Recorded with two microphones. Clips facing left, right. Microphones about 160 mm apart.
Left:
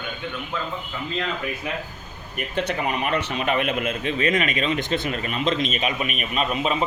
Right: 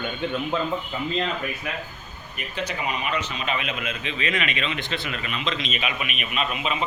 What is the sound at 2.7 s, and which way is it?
A man's voice, 55° left (ahead or behind).